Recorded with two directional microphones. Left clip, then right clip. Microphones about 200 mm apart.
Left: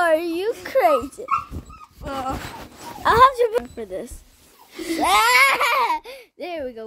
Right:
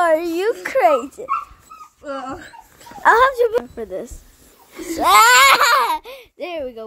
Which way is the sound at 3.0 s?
Centre (ahead or behind).